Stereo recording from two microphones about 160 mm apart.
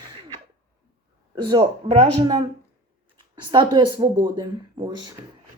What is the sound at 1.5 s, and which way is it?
Speech, 35° right (ahead or behind).